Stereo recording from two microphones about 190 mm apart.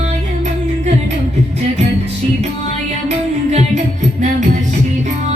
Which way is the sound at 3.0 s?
35° right (ahead or behind).